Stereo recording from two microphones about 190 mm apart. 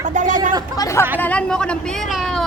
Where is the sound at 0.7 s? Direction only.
15° left (ahead or behind); by 2.4 s centre (ahead or behind).